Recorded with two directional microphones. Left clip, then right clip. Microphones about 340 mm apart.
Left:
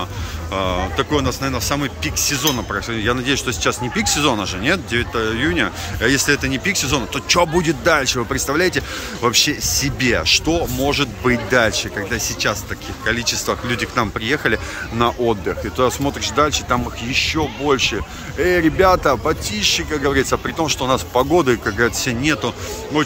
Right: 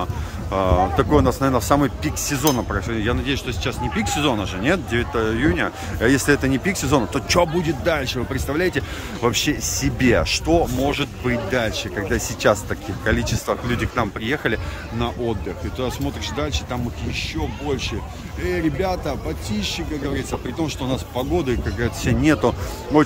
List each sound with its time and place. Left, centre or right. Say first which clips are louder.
0.5 s speech: right 2 dB; centre
12.4 s speech: right 2 dB; centre